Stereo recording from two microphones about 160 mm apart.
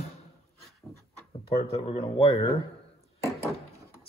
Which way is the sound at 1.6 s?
35° left (ahead or behind).